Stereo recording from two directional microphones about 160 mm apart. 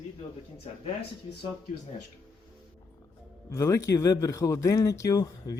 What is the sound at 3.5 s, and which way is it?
Speech, 20° left (ahead or behind).